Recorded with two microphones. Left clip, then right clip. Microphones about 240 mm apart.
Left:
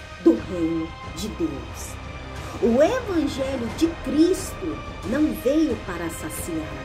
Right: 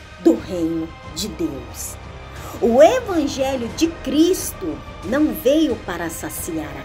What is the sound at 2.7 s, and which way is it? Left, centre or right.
A woman's voice, centre.